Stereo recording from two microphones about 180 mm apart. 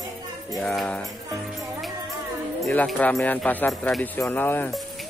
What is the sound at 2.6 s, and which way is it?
Speech, 5° left (ahead or behind).